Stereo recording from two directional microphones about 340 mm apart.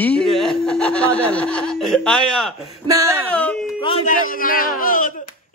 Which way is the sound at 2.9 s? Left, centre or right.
Centre.